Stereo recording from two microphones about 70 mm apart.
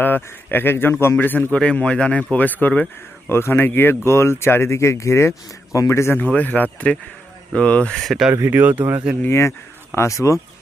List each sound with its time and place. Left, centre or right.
0.0 s speech: left
3.2 s speech: left
6.1 s speech: left
8.0 s speech: centre
8.4 s speech: right
9.9 s speech: left